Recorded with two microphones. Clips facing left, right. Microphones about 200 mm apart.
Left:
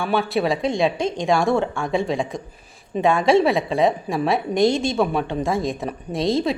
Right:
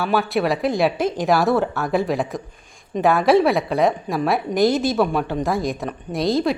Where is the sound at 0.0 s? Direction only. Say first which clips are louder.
Right 1 dB; centre (ahead or behind).